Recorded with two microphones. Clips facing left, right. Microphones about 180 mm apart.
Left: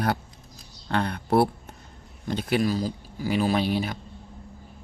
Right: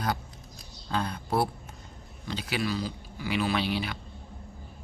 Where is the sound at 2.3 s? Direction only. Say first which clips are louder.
Left 6 dB; 50° left (ahead or behind).